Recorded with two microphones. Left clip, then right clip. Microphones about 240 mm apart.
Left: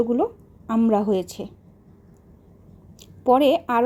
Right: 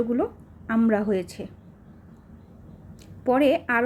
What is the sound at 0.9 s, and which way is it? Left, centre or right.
Speech, centre.